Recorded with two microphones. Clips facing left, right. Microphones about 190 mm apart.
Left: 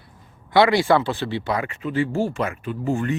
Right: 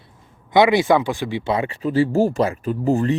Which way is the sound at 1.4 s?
25° right (ahead or behind).